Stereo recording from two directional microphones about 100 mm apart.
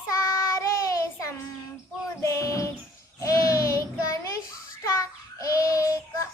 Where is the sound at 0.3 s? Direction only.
30° left (ahead or behind).